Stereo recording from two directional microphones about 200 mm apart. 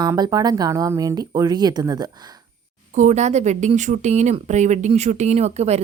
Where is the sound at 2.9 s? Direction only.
35° right (ahead or behind).